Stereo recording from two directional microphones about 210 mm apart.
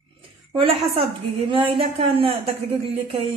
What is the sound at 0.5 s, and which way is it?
A woman's voice, 25° right (ahead or behind).